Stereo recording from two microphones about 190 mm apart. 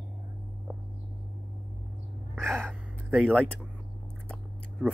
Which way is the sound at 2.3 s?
Centre (ahead or behind).